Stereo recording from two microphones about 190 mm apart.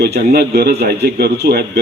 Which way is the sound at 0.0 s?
55° right (ahead or behind).